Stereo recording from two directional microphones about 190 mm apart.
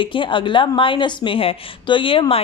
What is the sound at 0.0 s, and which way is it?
A woman's voice, 25° left (ahead or behind).